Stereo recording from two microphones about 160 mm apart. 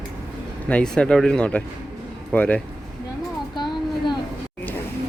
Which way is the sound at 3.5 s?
30° left (ahead or behind).